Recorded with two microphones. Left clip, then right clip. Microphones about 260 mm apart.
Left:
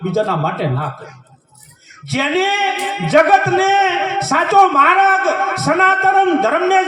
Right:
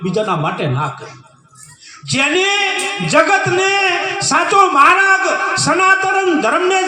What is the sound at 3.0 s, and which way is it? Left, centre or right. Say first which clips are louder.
A man's voice: left 2 dB; right.